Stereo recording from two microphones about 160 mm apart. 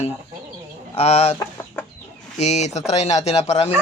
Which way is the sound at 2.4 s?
45° left (ahead or behind).